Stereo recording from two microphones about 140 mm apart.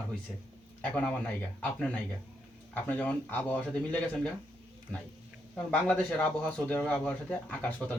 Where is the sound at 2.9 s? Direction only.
10° left (ahead or behind).